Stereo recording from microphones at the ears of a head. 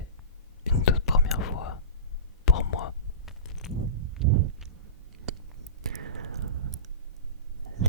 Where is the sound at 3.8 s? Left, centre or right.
Right.